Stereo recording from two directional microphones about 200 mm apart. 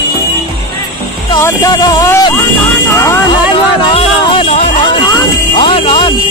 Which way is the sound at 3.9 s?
30° left (ahead or behind).